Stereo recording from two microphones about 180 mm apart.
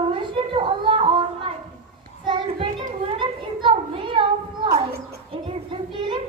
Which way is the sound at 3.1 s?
25° right (ahead or behind).